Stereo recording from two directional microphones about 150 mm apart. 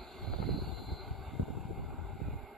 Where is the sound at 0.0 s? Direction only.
5° left (ahead or behind).